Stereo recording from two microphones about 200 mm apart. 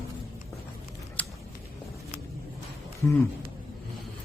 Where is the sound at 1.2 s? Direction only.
10° left (ahead or behind).